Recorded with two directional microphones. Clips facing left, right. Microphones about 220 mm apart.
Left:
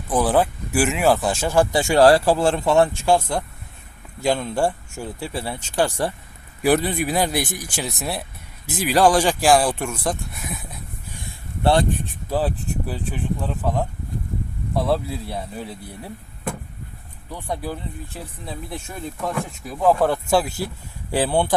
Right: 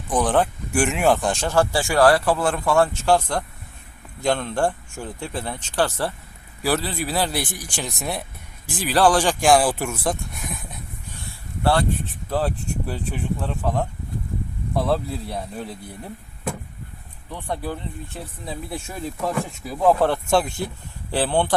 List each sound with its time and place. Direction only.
0.1 s speech: 5° left (ahead or behind)
11.3 s a sound: 20° left (ahead or behind)
12.3 s speech: 5° left (ahead or behind)
18.1 s speech: centre (ahead or behind)